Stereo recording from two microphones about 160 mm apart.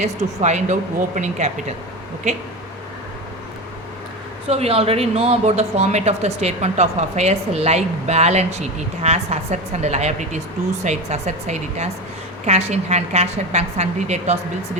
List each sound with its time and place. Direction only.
0.0 s speech: 45° right (ahead or behind)
4.4 s speech: 40° right (ahead or behind)